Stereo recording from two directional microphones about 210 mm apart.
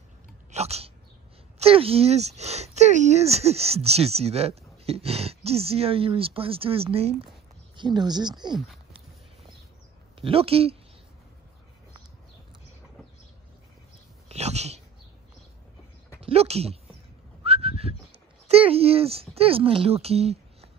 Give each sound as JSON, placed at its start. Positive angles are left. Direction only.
{"t": 0.5, "sound": "sneeze", "side_deg": -30}
{"t": 1.6, "sound": "speech", "side_deg": -25}
{"t": 10.2, "sound": "speech", "side_deg": -25}
{"t": 14.3, "sound": "cat", "side_deg": -30}
{"t": 16.2, "sound": "a sound", "side_deg": -30}
{"t": 17.4, "sound": "whistling", "side_deg": -30}
{"t": 18.5, "sound": "speech", "side_deg": -30}